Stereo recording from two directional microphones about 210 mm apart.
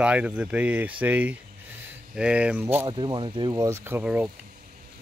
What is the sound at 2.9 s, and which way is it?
Speech, 20° right (ahead or behind).